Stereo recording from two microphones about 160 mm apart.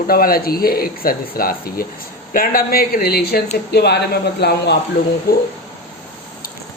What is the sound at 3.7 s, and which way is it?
Speech, 90° left.